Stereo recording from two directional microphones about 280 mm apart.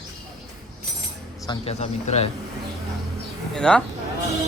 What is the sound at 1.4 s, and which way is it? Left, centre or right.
Speech, left.